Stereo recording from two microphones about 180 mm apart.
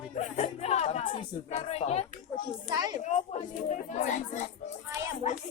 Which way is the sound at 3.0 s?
40° left (ahead or behind).